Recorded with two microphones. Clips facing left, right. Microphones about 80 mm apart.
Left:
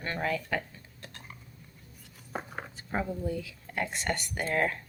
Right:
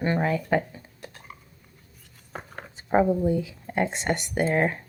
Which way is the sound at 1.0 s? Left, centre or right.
Centre.